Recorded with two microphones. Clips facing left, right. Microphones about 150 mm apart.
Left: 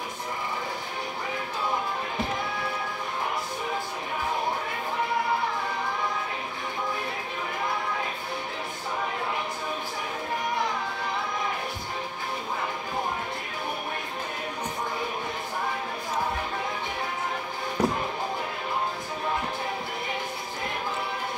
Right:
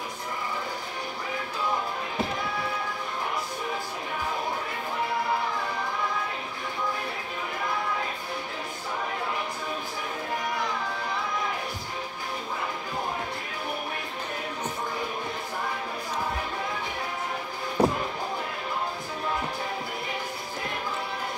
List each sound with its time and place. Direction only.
17.8 s music: 30° right (ahead or behind)